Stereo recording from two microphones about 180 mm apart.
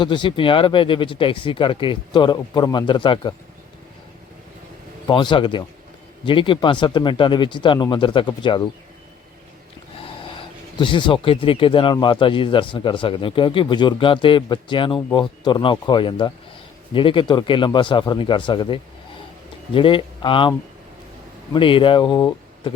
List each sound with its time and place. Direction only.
0.0 s speech: 25° left (ahead or behind)
5.0 s speech: 25° left (ahead or behind)
10.8 s speech: 25° left (ahead or behind)
21.5 s speech: 30° left (ahead or behind)